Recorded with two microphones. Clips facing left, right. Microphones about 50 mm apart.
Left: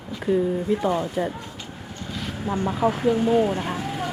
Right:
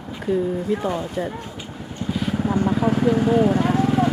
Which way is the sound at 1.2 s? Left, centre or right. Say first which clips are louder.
Left 1 dB; centre.